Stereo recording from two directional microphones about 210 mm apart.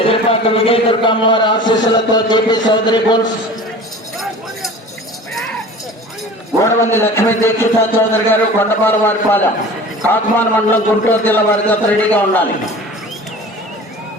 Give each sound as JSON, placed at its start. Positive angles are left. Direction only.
{"t": 0.0, "sound": "a man's voice", "side_deg": 25}
{"t": 6.6, "sound": "a man's voice", "side_deg": 10}